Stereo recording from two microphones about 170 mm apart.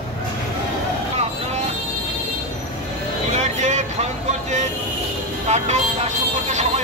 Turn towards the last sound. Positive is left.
turn(degrees=-45)  # may be behind; listen again after turning